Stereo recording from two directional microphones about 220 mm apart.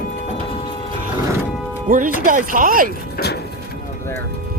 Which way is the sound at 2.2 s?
35° right (ahead or behind).